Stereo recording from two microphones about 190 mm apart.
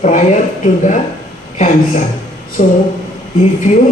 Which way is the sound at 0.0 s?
40° left (ahead or behind).